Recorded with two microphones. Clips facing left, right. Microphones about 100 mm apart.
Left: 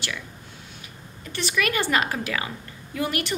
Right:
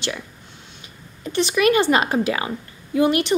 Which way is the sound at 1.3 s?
20° right (ahead or behind).